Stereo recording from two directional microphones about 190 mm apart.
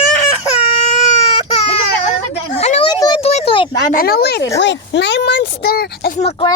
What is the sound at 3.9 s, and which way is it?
Speech, 55° left (ahead or behind).